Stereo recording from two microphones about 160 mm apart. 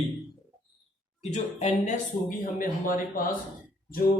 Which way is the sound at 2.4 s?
60° left (ahead or behind).